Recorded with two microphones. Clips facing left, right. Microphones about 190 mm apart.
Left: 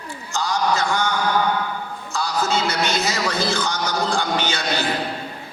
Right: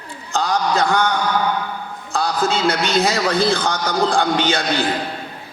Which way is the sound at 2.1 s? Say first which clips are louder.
Right 3 dB; 55° right (ahead or behind).